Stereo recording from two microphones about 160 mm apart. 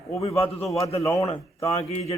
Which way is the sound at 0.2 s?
40° left (ahead or behind).